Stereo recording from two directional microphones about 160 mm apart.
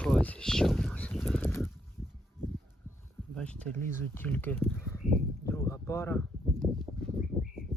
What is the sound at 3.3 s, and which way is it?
Speech, 10° left (ahead or behind).